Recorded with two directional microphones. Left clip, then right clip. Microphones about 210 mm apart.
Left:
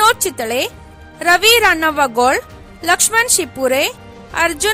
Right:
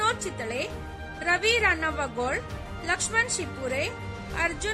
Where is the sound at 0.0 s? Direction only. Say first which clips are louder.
Left 14 dB; 50° left (ahead or behind).